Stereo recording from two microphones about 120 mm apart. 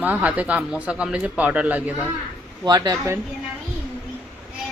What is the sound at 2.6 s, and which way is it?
Speech, 30° right (ahead or behind).